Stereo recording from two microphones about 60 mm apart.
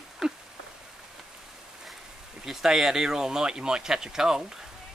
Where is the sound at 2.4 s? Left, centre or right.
Centre.